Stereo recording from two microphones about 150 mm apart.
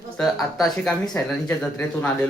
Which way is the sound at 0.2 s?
Centre (ahead or behind).